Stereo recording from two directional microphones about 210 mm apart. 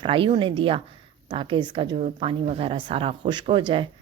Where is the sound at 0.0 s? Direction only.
25° right (ahead or behind).